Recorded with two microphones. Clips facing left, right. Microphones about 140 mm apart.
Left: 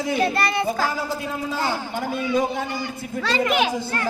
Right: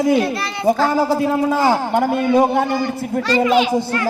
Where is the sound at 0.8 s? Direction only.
30° right (ahead or behind).